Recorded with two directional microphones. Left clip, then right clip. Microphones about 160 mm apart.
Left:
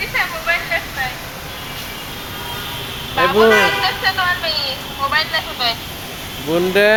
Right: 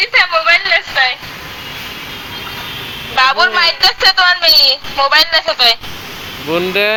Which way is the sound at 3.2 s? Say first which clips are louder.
Right 1 dB; 60° right (ahead or behind).